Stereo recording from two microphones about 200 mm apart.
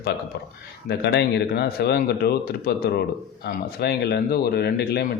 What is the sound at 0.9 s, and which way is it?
Speech, 55° left (ahead or behind).